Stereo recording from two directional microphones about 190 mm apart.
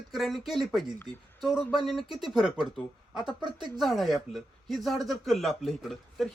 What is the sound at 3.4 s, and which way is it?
Speech, 25° right (ahead or behind).